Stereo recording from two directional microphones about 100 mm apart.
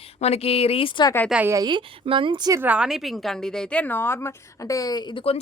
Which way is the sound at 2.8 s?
Centre (ahead or behind).